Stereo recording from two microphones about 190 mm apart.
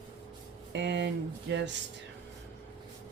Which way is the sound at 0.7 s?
65° right (ahead or behind).